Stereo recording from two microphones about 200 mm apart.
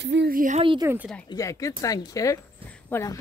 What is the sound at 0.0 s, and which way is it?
Speech, 60° right (ahead or behind).